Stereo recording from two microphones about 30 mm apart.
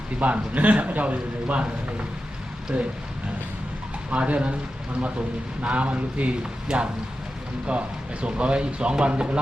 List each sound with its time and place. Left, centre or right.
0.2 s a man's voice: right
2.7 s speech: right
4.1 s a man's voice: right
5.6 s a man's voice: right
6.4 s speech: right
7.7 s speech: right